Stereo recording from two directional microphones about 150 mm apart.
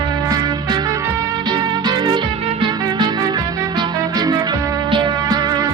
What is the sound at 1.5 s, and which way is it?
Music, 30° right (ahead or behind).